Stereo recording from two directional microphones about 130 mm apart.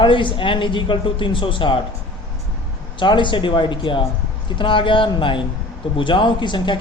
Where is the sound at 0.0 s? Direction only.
40° left (ahead or behind).